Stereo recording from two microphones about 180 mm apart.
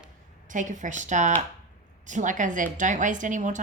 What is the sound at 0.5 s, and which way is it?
Speech, 45° right (ahead or behind).